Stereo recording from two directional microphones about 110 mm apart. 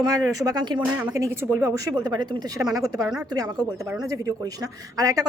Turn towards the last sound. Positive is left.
turn(degrees=-35)  # may be behind; listen again after turning